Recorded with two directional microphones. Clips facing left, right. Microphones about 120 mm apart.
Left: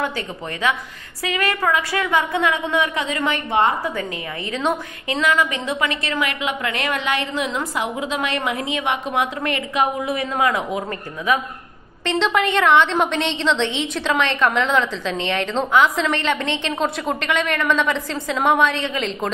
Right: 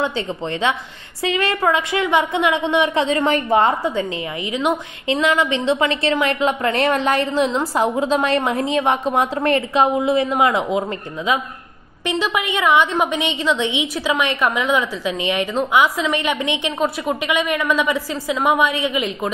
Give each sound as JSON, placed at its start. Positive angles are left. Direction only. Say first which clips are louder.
{"t": 1.2, "sound": "a woman's voice", "louder": "right 3 dB", "side_deg": -25}
{"t": 4.5, "sound": "a woman's voice", "louder": "right 2 dB", "side_deg": -15}
{"t": 5.2, "sound": "a woman's voice", "louder": "right 2 dB", "side_deg": -25}
{"t": 12.1, "sound": "a woman's voice", "louder": "left 2 dB", "side_deg": -10}